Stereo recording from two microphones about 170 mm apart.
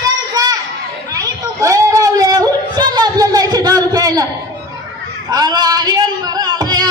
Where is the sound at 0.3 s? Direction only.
20° right (ahead or behind).